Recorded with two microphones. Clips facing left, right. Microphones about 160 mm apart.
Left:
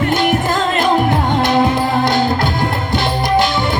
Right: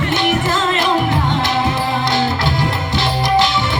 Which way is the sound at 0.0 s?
50° left (ahead or behind).